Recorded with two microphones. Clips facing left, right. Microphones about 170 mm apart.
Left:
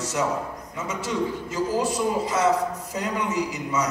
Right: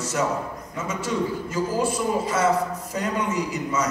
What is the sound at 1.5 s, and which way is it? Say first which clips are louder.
A man's voice: even; 15° left (ahead or behind).